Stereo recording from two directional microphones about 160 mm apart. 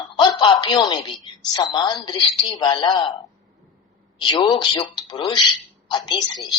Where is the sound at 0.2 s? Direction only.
25° left (ahead or behind).